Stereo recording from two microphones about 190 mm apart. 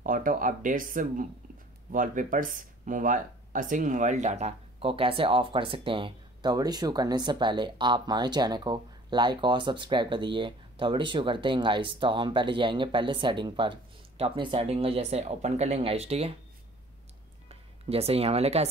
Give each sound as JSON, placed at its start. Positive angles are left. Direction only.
{"t": 0.0, "sound": "speech", "side_deg": -45}
{"t": 17.5, "sound": "speech", "side_deg": -30}